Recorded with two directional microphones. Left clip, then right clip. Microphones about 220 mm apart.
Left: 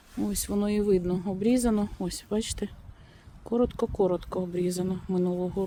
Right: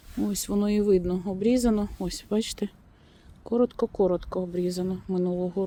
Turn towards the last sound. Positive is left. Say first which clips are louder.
# right 1 dB
turn(degrees=-5)  # may be behind; listen again after turning